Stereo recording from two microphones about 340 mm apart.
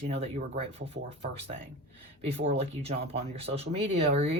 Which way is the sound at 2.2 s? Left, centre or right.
Centre.